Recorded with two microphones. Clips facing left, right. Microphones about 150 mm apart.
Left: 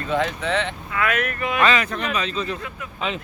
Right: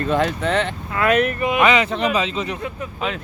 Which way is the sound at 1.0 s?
25° right (ahead or behind).